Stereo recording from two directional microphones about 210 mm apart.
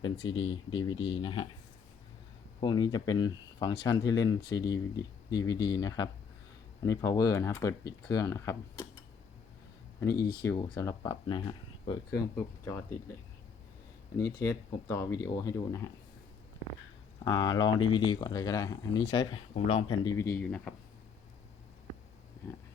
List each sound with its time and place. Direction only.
0.3 s speech: 20° left (ahead or behind)
2.6 s speech: 20° left (ahead or behind)
10.2 s speech: 50° left (ahead or behind)
10.4 s speech: 15° left (ahead or behind)
14.3 s speech: 15° left (ahead or behind)
17.2 s speech: 20° left (ahead or behind)
19.5 s speech: 30° left (ahead or behind); by 20.7 s 10° left (ahead or behind)